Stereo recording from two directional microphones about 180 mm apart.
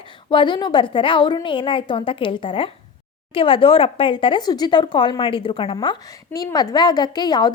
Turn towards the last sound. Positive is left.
turn(degrees=25)  # may be behind; listen again after turning